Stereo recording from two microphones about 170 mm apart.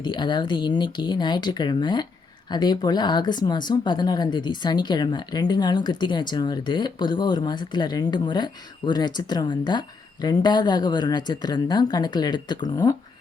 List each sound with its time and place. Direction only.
0.0 s speech: 25° left (ahead or behind)